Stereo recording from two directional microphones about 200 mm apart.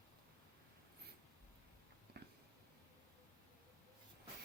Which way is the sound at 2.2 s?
55° right (ahead or behind).